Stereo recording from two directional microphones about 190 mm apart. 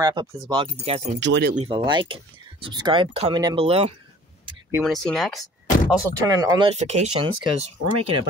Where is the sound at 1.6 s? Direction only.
25° right (ahead or behind).